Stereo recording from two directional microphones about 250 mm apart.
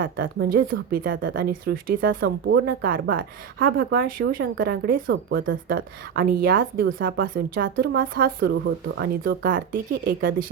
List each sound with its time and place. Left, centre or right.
0.0 s speech: right